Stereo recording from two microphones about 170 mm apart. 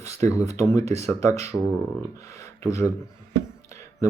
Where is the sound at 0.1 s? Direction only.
20° left (ahead or behind).